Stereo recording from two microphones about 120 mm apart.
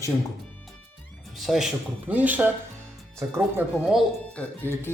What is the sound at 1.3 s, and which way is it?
Speech, centre (ahead or behind).